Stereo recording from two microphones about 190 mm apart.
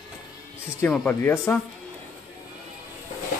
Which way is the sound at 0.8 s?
10° left (ahead or behind).